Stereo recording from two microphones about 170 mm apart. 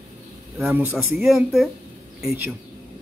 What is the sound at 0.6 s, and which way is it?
Speech, 10° right (ahead or behind).